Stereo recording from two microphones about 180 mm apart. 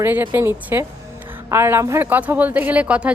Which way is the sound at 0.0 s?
10° right (ahead or behind).